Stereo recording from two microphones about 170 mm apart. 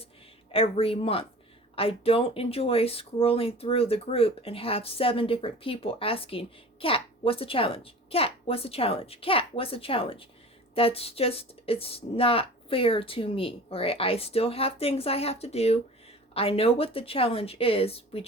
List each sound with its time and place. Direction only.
0.5 s speech: 35° left (ahead or behind)